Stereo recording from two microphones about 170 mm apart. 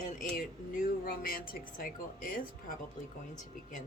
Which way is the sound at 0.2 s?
55° left (ahead or behind).